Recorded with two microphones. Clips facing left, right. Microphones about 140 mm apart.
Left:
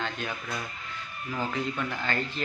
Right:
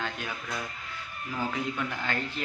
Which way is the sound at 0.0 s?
10° right (ahead or behind).